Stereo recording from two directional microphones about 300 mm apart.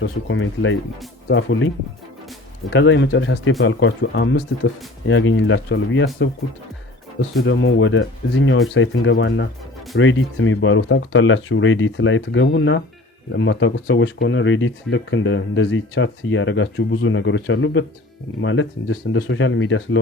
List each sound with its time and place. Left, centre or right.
0.0 s speech: left
7.4 s speech: left